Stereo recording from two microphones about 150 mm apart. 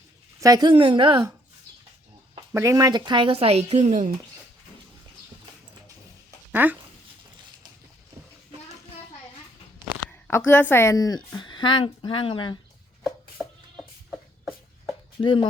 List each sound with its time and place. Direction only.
0.3 s speech: 25° right (ahead or behind)
2.5 s speech: 20° right (ahead or behind); by 4.1 s 55° right (ahead or behind)
6.5 s speech: 10° right (ahead or behind)
10.2 s a woman's voice: 15° left (ahead or behind); by 12.5 s 35° left (ahead or behind)
13.1 s a sound: 5° left (ahead or behind)
15.2 s speech: 35° left (ahead or behind)